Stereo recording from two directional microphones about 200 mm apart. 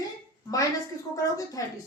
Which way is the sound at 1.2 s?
15° left (ahead or behind).